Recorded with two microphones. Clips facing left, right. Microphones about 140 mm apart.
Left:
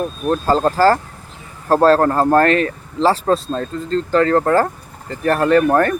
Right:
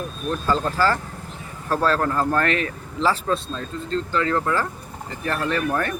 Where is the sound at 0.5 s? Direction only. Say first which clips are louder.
Left 7 dB; 35° left (ahead or behind).